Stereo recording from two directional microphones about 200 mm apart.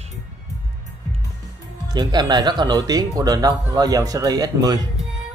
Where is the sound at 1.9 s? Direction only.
20° right (ahead or behind).